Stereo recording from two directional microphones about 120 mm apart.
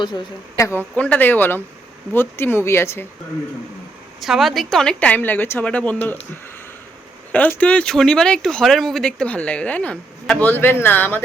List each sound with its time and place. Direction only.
0.5 s speech: 25° left (ahead or behind)
0.9 s speech: 10° left (ahead or behind)
4.2 s speech: centre (ahead or behind)
7.3 s speech: 10° left (ahead or behind)